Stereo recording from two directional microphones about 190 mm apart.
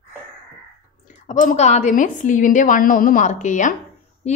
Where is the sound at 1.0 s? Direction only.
40° left (ahead or behind).